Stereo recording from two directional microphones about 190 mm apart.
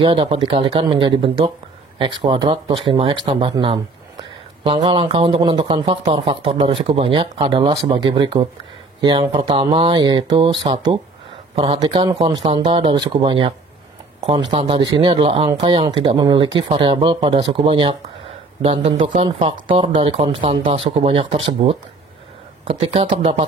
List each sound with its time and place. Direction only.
0.0 s speech: 30° right (ahead or behind)
14.5 s speech: 30° right (ahead or behind)
19.7 s speech: 25° right (ahead or behind)